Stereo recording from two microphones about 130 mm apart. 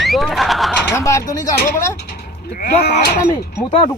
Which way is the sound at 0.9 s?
25° left (ahead or behind).